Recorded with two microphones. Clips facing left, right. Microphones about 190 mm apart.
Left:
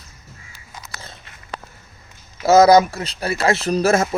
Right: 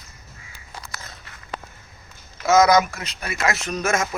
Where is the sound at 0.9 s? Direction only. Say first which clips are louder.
Left 1 dB; 25° left (ahead or behind).